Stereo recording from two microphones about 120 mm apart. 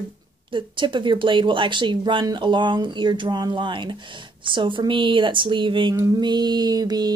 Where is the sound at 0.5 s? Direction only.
45° right (ahead or behind).